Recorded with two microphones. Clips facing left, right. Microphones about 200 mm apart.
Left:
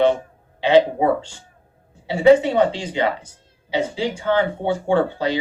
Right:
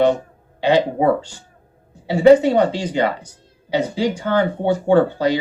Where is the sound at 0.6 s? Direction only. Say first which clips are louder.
Left 1 dB; 40° right (ahead or behind).